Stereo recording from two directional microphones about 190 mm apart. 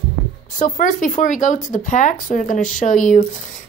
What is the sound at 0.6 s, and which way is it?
Speech, 40° left (ahead or behind).